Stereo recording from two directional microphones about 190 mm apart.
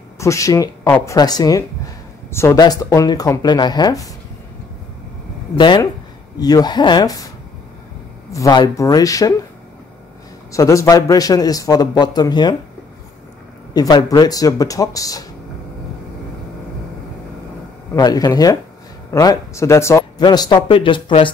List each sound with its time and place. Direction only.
0.2 s speech: 15° left (ahead or behind)
5.6 s speech: 25° left (ahead or behind)
8.3 s speech: 20° left (ahead or behind)
10.5 s speech: 15° left (ahead or behind)
13.7 s speech: 20° left (ahead or behind)
17.9 s speech: 20° left (ahead or behind)